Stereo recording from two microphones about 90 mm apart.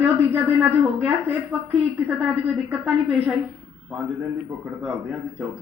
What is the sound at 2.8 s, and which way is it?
Speech, 10° right (ahead or behind).